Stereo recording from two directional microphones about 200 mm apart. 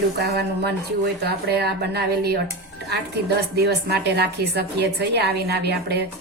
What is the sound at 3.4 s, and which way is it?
A woman's voice, 55° right (ahead or behind).